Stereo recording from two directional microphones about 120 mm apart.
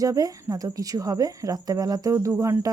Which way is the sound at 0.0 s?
30° right (ahead or behind).